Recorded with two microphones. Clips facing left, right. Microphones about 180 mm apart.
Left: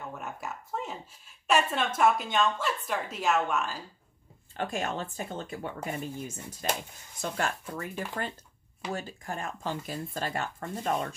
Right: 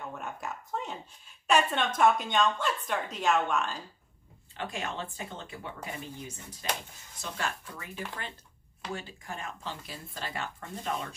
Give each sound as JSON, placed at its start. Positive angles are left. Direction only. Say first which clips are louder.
{"t": 0.0, "sound": "a woman's voice", "louder": "even", "side_deg": 5}
{"t": 4.6, "sound": "speech", "louder": "left 4 dB", "side_deg": 45}